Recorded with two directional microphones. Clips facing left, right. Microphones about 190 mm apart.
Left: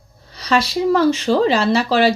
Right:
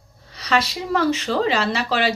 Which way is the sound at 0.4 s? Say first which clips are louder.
Left 6 dB; 35° left (ahead or behind).